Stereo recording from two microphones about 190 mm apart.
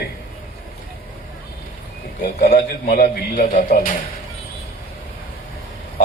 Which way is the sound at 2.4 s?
55° left (ahead or behind).